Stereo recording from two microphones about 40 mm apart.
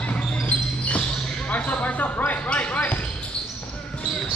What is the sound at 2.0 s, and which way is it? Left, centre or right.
Basketball bounce, left.